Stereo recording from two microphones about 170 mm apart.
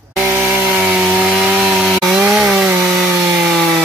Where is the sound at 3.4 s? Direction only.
Centre (ahead or behind).